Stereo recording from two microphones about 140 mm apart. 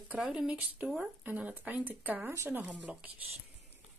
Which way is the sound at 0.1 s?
5° right (ahead or behind).